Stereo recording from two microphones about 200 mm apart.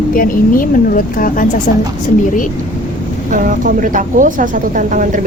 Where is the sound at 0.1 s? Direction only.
45° left (ahead or behind).